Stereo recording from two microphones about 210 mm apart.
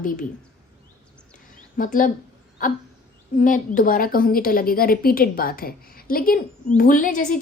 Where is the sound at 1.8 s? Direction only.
40° left (ahead or behind).